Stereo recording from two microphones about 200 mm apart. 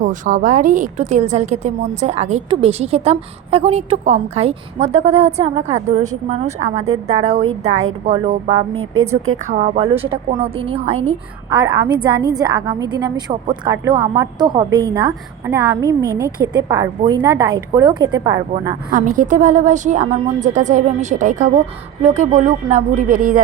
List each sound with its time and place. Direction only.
0.0 s a woman's voice: 40° right (ahead or behind)
6.8 s a woman's voice: 90° right
8.0 s a woman's voice: 30° right (ahead or behind)
8.7 s a woman's voice: 90° right
9.5 s a woman's voice: 35° right (ahead or behind); by 15.1 s 20° right (ahead or behind)
15.4 s a woman's voice: 10° right (ahead or behind)
18.9 s a woman's voice: 45° right (ahead or behind)